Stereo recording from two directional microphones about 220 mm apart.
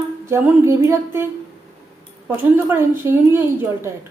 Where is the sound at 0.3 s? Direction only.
10° right (ahead or behind).